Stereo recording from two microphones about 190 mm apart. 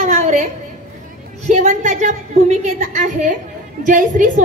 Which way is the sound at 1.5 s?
40° right (ahead or behind).